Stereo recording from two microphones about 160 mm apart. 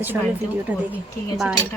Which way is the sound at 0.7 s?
10° right (ahead or behind).